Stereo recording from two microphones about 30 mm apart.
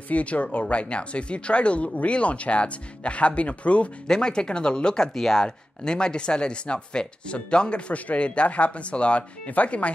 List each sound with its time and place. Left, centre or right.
0.1 s speech: left
4.1 s speech: left
4.9 s speech: centre
5.9 s speech: left
8.2 s speech: left
9.5 s speech: left